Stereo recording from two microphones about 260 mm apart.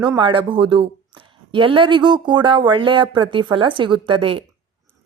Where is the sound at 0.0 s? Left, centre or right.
Centre.